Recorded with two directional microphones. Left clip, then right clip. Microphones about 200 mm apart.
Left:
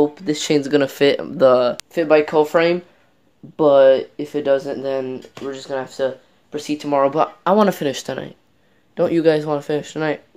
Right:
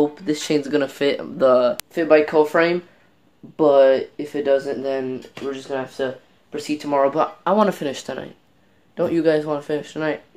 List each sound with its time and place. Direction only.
0.0 s speech: 35° left (ahead or behind)